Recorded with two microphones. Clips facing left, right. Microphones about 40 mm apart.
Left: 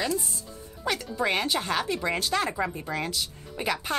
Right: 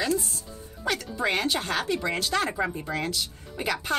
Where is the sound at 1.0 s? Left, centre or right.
Centre.